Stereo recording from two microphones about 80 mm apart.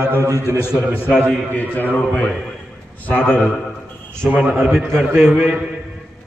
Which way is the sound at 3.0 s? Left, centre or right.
Centre.